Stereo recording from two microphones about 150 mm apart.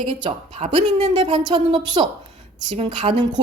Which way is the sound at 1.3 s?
30° right (ahead or behind).